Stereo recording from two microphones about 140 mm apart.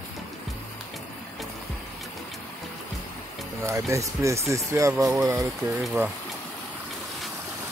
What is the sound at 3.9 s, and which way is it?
Speech, 20° right (ahead or behind).